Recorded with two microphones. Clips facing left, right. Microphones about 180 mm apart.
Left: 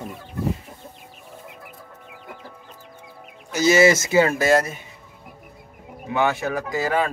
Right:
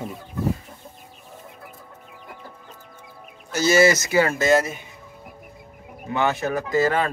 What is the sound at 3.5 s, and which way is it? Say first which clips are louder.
Speech: left 1 dB; 15° left (ahead or behind).